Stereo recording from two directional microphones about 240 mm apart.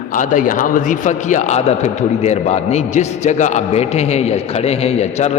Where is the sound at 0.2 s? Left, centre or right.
Left.